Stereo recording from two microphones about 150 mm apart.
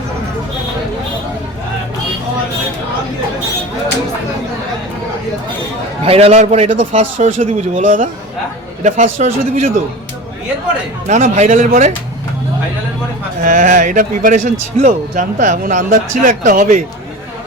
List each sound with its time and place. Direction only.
6.1 s a man's voice: 45° right (ahead or behind)
11.1 s speech: 55° right (ahead or behind)
13.4 s speech: 60° right (ahead or behind)